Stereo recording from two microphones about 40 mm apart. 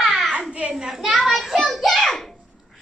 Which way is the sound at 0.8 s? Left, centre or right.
Centre.